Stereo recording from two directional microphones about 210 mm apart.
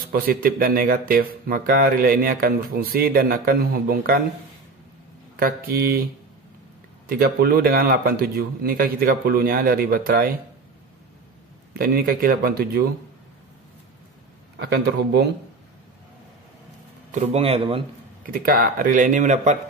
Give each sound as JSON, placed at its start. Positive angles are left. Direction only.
{"t": 0.1, "sound": "speech", "side_deg": -45}
{"t": 5.3, "sound": "speech", "side_deg": -45}
{"t": 7.1, "sound": "speech", "side_deg": -45}
{"t": 11.7, "sound": "speech", "side_deg": -45}
{"t": 14.6, "sound": "speech", "side_deg": -55}
{"t": 17.1, "sound": "speech", "side_deg": -30}
{"t": 18.3, "sound": "speech", "side_deg": -45}